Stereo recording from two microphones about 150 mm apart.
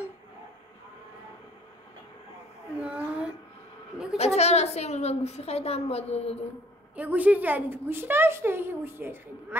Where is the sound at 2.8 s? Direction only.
10° right (ahead or behind).